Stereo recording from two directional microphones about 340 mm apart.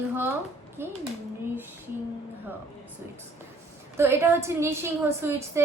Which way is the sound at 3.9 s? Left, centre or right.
Centre.